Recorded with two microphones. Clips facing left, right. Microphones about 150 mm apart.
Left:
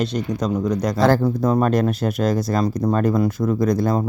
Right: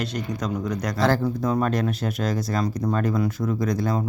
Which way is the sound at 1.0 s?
45° left (ahead or behind).